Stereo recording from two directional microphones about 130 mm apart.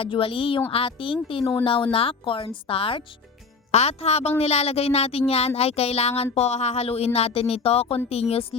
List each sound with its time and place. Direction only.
0.0 s speech: 45° left (ahead or behind)